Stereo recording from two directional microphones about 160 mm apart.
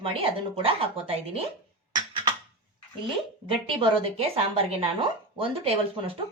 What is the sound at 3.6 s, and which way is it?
Speech, 30° right (ahead or behind).